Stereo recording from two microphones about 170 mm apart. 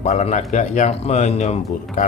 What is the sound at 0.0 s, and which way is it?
Speech, 45° left (ahead or behind).